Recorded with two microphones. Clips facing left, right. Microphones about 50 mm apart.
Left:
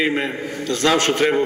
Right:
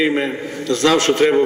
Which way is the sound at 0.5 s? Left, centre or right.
Left.